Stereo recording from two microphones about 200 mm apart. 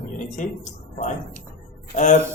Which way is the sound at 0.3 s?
40° left (ahead or behind).